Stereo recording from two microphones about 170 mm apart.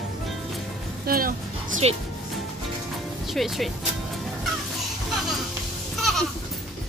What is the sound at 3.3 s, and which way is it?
Speech, centre (ahead or behind).